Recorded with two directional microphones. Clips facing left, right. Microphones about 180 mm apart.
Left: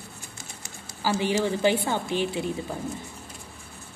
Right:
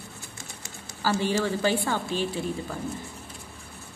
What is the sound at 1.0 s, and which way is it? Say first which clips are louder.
A woman's voice: left 1 dB; 15° left (ahead or behind).